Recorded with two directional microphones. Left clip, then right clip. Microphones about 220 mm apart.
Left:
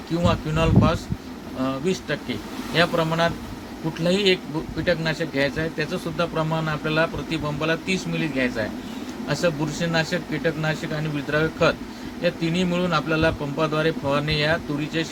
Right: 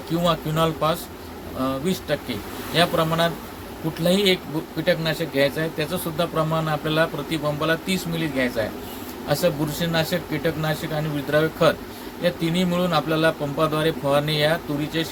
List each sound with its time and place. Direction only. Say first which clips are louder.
0.3 s speech: right 2 dB; 5° left (ahead or behind)
2.7 s speech: right 1 dB; 5° left (ahead or behind)